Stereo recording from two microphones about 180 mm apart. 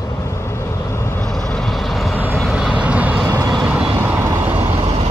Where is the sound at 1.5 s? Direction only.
Centre (ahead or behind).